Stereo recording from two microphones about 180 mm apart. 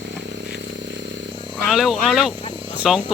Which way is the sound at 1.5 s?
Centre (ahead or behind).